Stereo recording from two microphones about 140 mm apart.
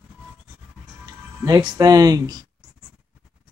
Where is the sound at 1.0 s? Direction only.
25° right (ahead or behind).